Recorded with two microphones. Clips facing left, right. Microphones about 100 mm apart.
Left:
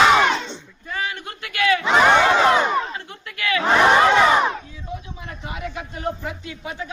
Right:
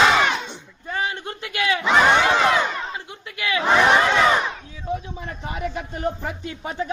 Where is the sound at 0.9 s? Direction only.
30° right (ahead or behind).